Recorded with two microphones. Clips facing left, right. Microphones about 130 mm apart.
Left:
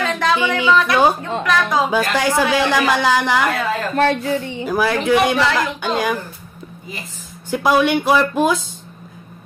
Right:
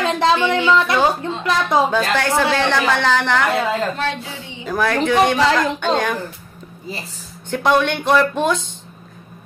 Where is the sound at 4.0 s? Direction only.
55° left (ahead or behind).